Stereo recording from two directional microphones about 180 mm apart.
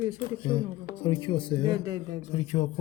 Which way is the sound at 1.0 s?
30° left (ahead or behind).